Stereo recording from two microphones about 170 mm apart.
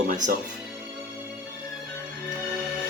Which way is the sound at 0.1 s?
50° right (ahead or behind).